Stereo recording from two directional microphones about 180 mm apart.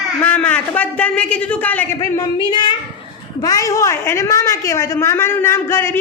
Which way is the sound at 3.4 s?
20° left (ahead or behind).